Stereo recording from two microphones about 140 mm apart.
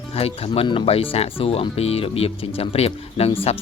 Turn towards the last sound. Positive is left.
turn(degrees=40)  # may be behind; listen again after turning